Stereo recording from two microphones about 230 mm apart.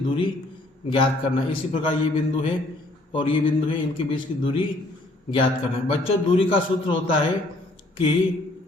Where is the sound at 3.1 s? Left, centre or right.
Left.